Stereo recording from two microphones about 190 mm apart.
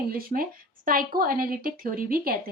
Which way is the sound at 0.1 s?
50° right (ahead or behind).